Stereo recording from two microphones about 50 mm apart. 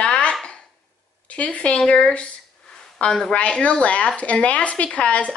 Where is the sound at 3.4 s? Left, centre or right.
Left.